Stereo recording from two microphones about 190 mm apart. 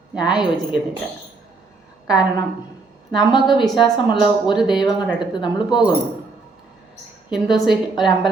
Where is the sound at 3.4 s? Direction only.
Centre (ahead or behind).